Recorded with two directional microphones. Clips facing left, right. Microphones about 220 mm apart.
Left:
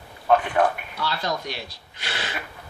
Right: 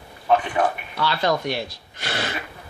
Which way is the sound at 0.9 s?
70° right (ahead or behind).